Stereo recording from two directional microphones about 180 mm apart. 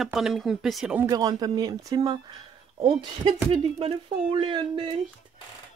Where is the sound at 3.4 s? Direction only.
30° right (ahead or behind).